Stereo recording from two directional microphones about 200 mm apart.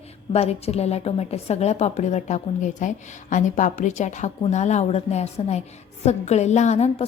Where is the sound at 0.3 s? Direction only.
30° left (ahead or behind).